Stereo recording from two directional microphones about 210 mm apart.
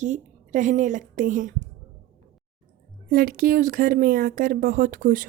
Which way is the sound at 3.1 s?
45° right (ahead or behind).